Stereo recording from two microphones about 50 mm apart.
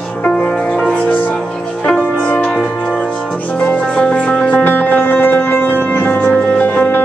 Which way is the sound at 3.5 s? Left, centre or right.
Left.